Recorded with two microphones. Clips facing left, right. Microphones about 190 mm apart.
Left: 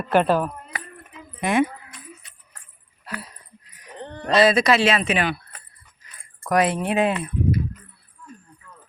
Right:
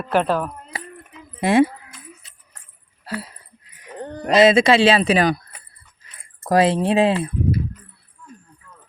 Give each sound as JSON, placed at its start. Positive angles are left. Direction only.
{"t": 0.0, "sound": "speech", "side_deg": 0}
{"t": 1.4, "sound": "speech", "side_deg": -30}
{"t": 3.9, "sound": "a sound", "side_deg": -40}
{"t": 4.4, "sound": "speech", "side_deg": -25}